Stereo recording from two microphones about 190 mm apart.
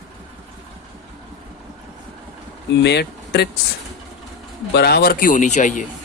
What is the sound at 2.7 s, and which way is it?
Speech, 65° left (ahead or behind).